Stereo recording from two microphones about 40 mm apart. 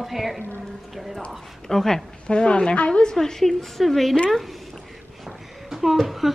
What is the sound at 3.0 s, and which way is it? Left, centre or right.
A woman's voice, centre.